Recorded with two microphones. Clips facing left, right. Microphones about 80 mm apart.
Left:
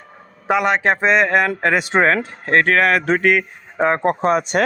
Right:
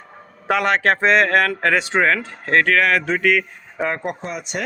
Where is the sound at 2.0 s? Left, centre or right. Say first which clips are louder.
Left 2 dB; left.